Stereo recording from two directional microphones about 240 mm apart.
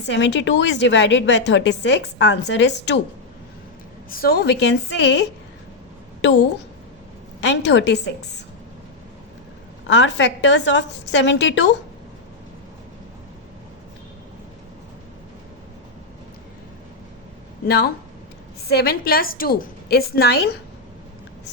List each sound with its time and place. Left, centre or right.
0.0 s a woman's voice: left
4.1 s a woman's voice: left
7.5 s a woman's voice: left
9.8 s a woman's voice: left
17.7 s a woman's voice: left